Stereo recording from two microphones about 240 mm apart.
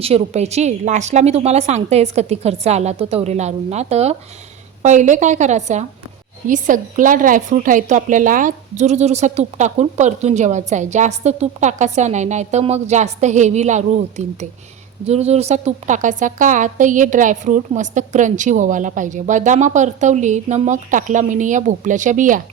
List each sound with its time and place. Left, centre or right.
0.0 s a woman's voice: right